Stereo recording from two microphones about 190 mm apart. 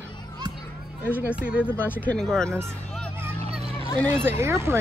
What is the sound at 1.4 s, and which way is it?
Speech, 5° right (ahead or behind).